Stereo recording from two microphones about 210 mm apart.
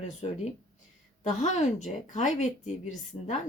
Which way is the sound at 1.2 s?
35° left (ahead or behind).